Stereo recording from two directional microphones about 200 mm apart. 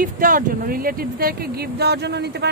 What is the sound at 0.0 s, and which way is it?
Speech, 45° right (ahead or behind).